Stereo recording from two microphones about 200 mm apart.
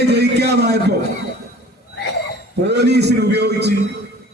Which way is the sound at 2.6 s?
55° right (ahead or behind).